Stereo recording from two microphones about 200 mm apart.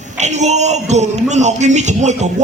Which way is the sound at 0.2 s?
35° right (ahead or behind).